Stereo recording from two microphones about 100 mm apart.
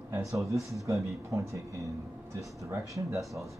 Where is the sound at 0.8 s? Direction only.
30° right (ahead or behind).